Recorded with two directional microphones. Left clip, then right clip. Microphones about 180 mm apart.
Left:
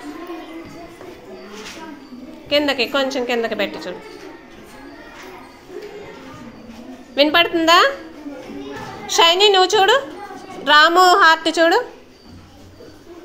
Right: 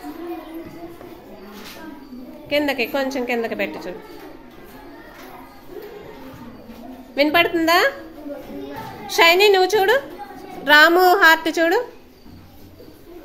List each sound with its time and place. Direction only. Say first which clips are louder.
2.5 s a woman's voice: left 3 dB; 5° right (ahead or behind)
7.2 s a woman's voice: left 2 dB; 5° right (ahead or behind)
9.0 s a woman's voice: left 1 dB; 10° right (ahead or behind)